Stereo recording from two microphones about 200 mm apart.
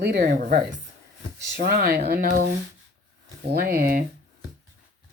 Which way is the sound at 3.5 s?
45° right (ahead or behind).